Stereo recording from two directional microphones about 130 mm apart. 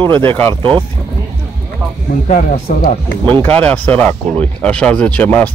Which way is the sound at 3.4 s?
10° left (ahead or behind).